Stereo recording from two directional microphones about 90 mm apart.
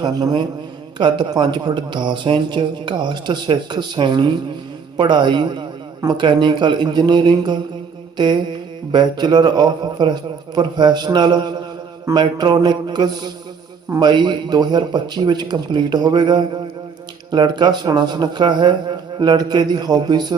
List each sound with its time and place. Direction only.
0.0 s speech: 50° right (ahead or behind)
0.9 s speech: 60° right (ahead or behind)
8.1 s mantra: 55° right (ahead or behind)
8.9 s speech: 55° right (ahead or behind)